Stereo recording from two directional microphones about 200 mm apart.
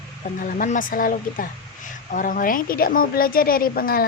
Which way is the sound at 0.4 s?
40° left (ahead or behind).